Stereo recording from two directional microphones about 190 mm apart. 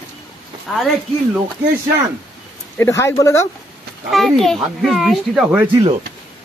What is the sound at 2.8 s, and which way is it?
Speech, 15° left (ahead or behind).